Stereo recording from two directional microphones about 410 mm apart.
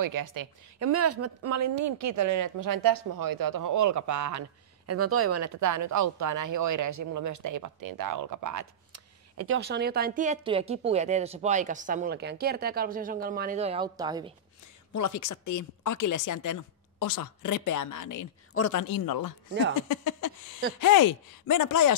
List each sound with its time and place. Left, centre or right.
0.0 s speech: right
0.8 s speech: right
9.6 s speech: right
14.9 s a woman's voice: left
18.8 s speech: left
19.9 s a sound: left
20.8 s a woman's voice: left